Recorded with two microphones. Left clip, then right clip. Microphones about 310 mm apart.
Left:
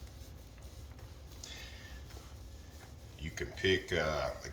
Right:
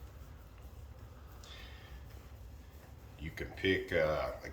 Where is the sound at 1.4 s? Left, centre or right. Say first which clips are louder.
Left 5 dB; centre.